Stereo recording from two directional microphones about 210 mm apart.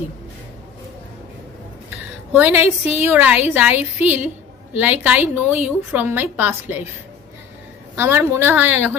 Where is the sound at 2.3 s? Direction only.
10° right (ahead or behind).